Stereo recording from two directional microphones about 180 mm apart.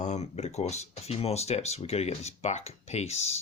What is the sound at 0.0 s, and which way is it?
Speech, 40° left (ahead or behind).